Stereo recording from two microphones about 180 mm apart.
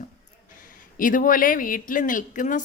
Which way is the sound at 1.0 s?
50° left (ahead or behind).